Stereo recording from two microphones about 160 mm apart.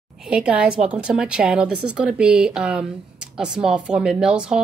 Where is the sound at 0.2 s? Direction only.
5° right (ahead or behind).